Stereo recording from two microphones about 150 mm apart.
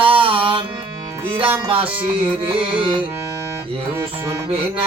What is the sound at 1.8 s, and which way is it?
Music, 10° right (ahead or behind).